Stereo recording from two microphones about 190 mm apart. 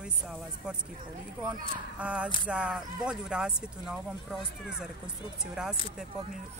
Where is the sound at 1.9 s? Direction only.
5° right (ahead or behind).